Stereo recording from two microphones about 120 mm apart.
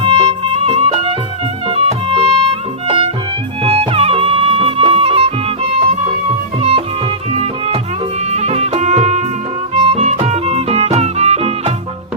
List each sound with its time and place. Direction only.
0.0 s music: 60° right (ahead or behind)
6.6 s music: 55° right (ahead or behind)
8.3 s music: 65° right (ahead or behind)